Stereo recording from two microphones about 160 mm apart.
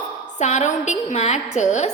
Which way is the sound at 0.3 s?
45° left (ahead or behind).